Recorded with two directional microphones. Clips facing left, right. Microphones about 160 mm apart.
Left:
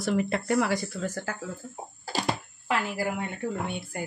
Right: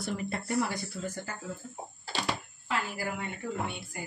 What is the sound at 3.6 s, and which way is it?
Speech, 55° left (ahead or behind).